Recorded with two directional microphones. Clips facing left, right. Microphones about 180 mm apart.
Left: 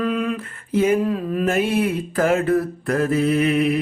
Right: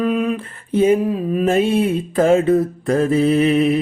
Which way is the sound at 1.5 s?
25° right (ahead or behind).